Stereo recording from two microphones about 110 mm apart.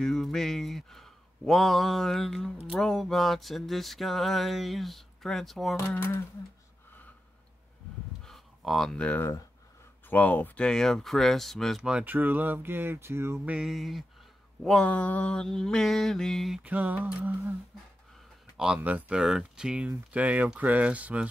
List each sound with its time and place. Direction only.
0.0 s speech: 5° left (ahead or behind)
5.8 s speech: 20° left (ahead or behind)
8.2 s a sound: centre (ahead or behind)
10.0 s speech: 15° left (ahead or behind); by 13.4 s 25° right (ahead or behind)
13.5 s speech: 5° right (ahead or behind)
16.6 s speech: 15° right (ahead or behind)
18.8 s speech: 15° right (ahead or behind)